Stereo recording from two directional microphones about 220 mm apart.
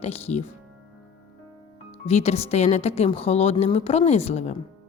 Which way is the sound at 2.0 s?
30° left (ahead or behind).